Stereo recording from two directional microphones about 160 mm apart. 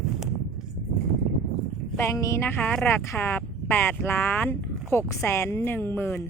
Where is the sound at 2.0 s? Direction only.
20° left (ahead or behind).